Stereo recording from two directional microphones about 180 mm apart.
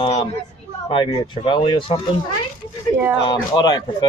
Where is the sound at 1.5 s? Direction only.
25° left (ahead or behind).